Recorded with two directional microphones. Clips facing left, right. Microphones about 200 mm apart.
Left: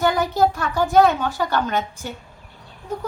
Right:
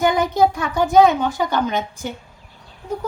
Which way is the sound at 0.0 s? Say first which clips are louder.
Right 2 dB; 20° right (ahead or behind).